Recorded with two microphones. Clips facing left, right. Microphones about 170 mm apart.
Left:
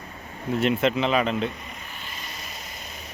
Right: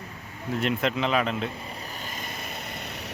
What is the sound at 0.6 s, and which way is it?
Speech, centre (ahead or behind).